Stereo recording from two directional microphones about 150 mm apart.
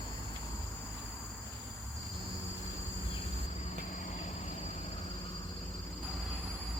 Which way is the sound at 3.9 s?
55° left (ahead or behind).